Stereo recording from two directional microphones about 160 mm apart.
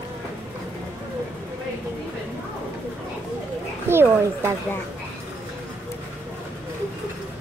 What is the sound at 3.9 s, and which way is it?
Speech, 15° right (ahead or behind).